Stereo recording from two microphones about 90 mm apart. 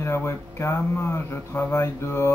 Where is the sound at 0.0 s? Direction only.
30° left (ahead or behind).